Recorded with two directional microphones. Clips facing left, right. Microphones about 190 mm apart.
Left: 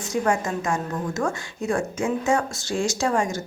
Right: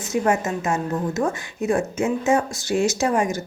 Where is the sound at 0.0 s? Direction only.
20° right (ahead or behind).